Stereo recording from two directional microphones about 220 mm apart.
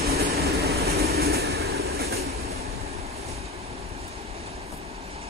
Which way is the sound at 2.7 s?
30° right (ahead or behind).